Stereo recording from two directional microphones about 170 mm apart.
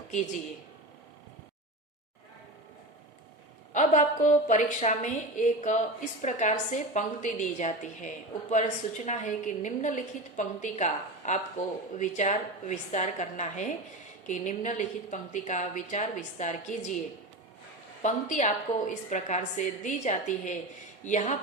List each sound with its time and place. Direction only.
3.7 s a woman's voice: 45° left (ahead or behind)
18.0 s a woman's voice: 45° left (ahead or behind)